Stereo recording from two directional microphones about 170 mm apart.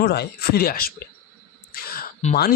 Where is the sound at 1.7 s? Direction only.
60° left (ahead or behind).